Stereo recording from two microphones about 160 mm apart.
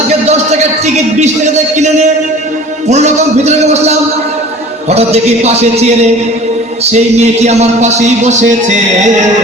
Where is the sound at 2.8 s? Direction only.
45° right (ahead or behind).